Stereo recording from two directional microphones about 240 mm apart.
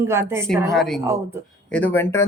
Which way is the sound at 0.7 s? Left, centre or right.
Centre.